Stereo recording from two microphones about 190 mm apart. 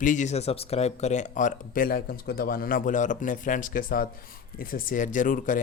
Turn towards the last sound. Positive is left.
turn(degrees=45)  # may be behind; listen again after turning